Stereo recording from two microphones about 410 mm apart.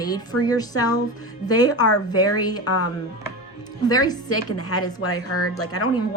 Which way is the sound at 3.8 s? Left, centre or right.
Centre.